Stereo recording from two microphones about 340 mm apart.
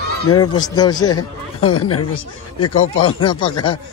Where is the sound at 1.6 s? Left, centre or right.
Left.